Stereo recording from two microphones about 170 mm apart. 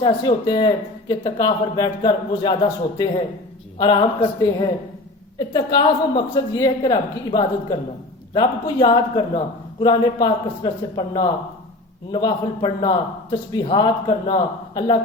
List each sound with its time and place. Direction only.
0.0 s speech: 30° left (ahead or behind)
3.8 s speech: 25° left (ahead or behind)